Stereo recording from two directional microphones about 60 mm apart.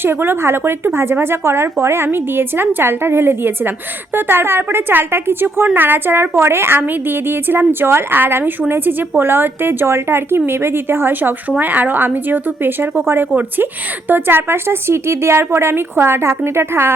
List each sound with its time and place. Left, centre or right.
0.0 s a woman's voice: right